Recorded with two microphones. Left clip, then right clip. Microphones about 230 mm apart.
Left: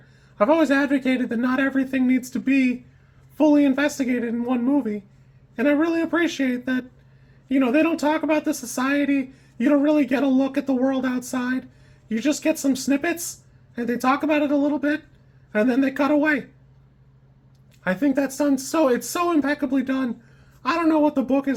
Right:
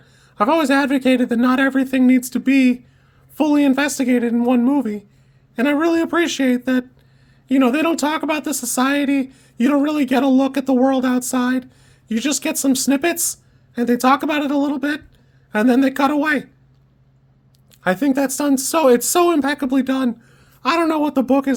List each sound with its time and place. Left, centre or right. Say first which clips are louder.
0.3 s speech: right 3 dB; right
17.7 s speech: right 4 dB; right